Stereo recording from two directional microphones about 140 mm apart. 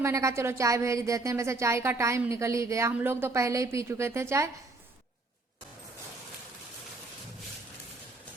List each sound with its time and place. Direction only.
0.0 s speech: 20° right (ahead or behind)